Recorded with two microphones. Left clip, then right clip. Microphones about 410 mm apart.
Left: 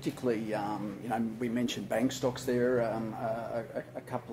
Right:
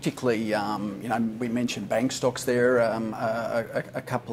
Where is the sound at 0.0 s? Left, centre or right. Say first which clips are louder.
Right 6 dB; right.